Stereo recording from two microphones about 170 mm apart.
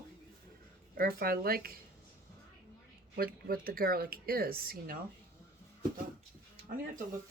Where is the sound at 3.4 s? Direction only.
60° right (ahead or behind).